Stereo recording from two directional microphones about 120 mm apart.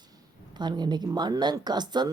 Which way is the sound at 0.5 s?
35° right (ahead or behind).